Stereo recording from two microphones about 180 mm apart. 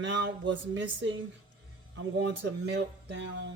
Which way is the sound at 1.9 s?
65° right (ahead or behind).